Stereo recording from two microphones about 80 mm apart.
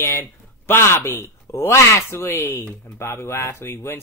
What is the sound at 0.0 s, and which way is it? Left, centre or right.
Speech, left.